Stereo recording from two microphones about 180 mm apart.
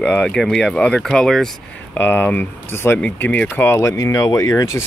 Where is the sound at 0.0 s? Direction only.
5° left (ahead or behind).